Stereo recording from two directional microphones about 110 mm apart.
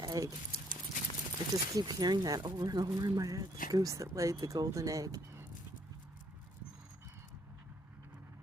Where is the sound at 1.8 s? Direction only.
40° right (ahead or behind).